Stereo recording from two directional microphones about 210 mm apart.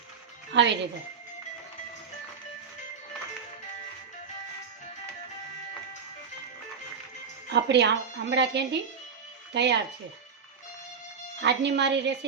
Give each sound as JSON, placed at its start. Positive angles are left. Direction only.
{"t": 0.5, "sound": "speech", "side_deg": -60}
{"t": 7.5, "sound": "speech", "side_deg": -55}
{"t": 11.3, "sound": "speech", "side_deg": -55}